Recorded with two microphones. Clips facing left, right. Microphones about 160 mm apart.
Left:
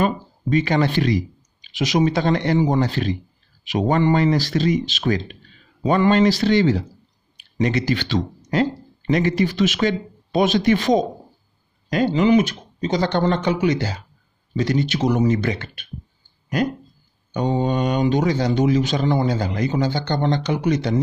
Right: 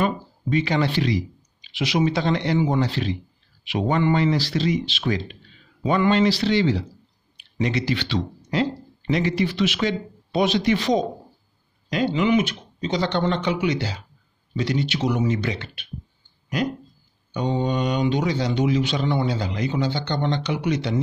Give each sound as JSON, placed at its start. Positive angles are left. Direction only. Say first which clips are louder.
{"t": 0.0, "sound": "speech", "louder": "left 2 dB", "side_deg": 45}
{"t": 17.3, "sound": "speech", "louder": "left 3 dB", "side_deg": 45}